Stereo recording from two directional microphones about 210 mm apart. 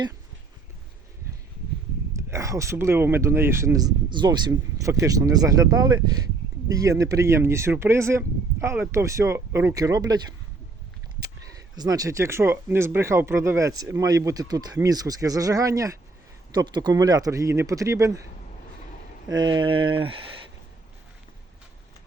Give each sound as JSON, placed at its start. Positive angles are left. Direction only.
{"t": 2.1, "sound": "speech", "side_deg": -15}
{"t": 19.4, "sound": "speech", "side_deg": -20}